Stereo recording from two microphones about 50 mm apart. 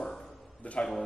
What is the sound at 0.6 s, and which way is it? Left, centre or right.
Speech, left.